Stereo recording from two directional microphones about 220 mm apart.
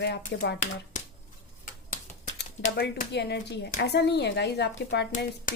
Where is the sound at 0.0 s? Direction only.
50° left (ahead or behind).